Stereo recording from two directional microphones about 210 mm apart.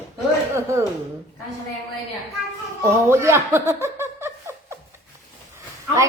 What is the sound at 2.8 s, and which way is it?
Giggle, 10° right (ahead or behind).